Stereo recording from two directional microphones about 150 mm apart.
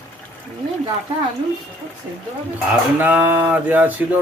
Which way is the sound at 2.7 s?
10° right (ahead or behind).